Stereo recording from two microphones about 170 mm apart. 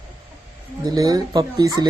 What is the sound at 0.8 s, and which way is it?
Speech, 25° right (ahead or behind).